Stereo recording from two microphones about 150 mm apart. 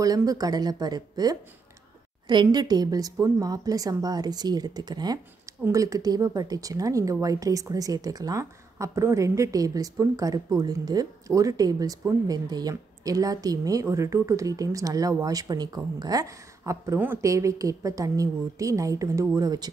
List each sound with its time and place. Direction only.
0.0 s speech: 25° right (ahead or behind)